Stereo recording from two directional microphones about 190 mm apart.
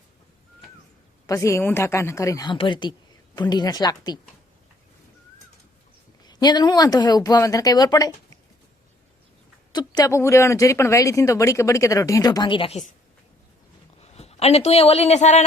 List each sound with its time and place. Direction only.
1.3 s speech: 15° left (ahead or behind)
6.2 s speech: 20° left (ahead or behind)
9.7 s speech: 20° left (ahead or behind)
14.0 s speech: 35° left (ahead or behind)